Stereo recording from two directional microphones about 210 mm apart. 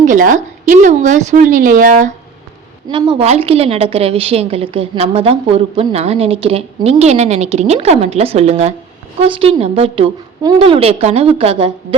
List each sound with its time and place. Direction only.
0.0 s a woman's voice: 40° right (ahead or behind)
2.9 s a woman's voice: 25° right (ahead or behind)